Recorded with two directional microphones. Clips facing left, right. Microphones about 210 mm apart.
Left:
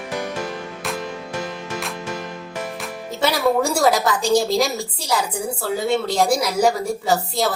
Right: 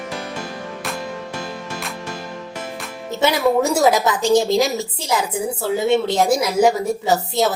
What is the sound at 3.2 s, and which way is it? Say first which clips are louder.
A woman's voice: right 2 dB; 20° right (ahead or behind).